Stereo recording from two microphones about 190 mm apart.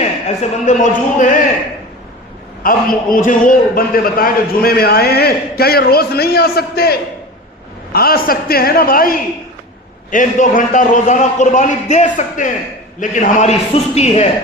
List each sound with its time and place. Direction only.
0.6 s a man's voice: 40° left (ahead or behind)
2.6 s a man's voice: 45° left (ahead or behind)